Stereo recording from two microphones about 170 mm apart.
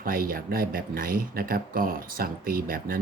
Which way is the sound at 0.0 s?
55° right (ahead or behind).